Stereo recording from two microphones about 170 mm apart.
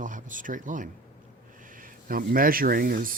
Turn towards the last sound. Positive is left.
turn(degrees=-55)  # may be behind; listen again after turning